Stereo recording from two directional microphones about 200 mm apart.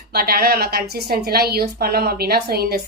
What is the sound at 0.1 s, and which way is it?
A woman's voice, 50° right (ahead or behind).